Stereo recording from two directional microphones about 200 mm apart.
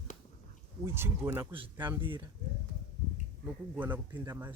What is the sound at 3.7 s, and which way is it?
Speech, 10° right (ahead or behind).